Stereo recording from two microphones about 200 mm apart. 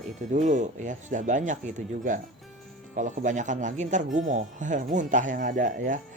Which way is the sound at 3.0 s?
40° right (ahead or behind).